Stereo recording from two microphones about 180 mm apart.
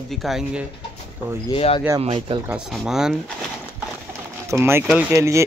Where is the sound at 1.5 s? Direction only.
30° left (ahead or behind).